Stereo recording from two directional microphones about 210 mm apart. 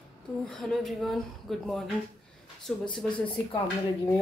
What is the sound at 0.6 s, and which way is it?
Speech, 5° left (ahead or behind).